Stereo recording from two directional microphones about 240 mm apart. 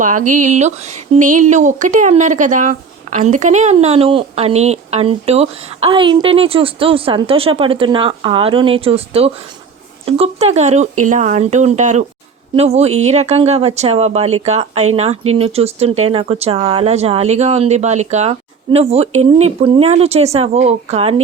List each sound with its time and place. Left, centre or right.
0.0 s speech: right